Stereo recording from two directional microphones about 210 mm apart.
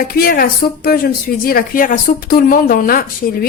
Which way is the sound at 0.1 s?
45° left (ahead or behind).